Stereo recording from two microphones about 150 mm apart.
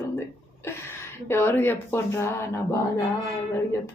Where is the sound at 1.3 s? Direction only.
15° left (ahead or behind).